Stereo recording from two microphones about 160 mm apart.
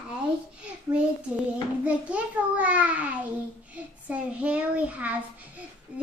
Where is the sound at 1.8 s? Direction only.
10° right (ahead or behind).